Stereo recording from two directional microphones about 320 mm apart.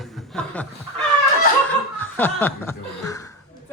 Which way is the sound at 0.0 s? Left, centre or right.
Centre.